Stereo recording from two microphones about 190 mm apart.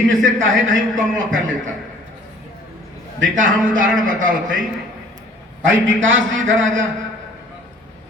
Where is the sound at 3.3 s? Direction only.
45° right (ahead or behind).